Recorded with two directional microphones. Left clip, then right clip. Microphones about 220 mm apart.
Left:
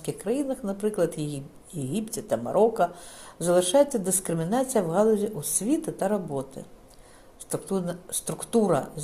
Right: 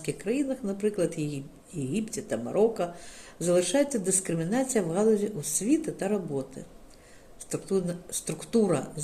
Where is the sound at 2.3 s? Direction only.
20° left (ahead or behind).